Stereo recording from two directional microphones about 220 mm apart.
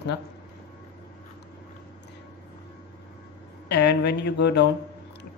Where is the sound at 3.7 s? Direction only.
50° left (ahead or behind).